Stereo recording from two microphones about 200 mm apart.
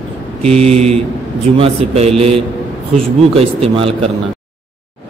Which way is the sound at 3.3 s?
30° right (ahead or behind).